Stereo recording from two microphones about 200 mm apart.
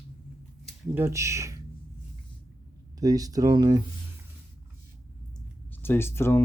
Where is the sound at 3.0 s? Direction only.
20° right (ahead or behind).